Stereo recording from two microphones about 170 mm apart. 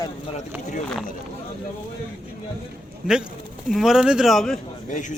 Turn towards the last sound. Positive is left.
turn(degrees=45)  # may be behind; listen again after turning